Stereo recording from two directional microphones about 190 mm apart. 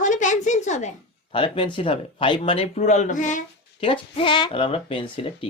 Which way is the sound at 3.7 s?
30° left (ahead or behind).